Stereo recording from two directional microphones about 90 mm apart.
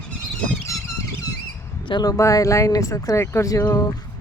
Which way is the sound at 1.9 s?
55° left (ahead or behind).